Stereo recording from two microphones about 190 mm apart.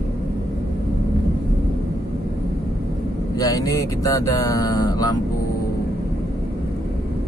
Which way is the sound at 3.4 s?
20° left (ahead or behind).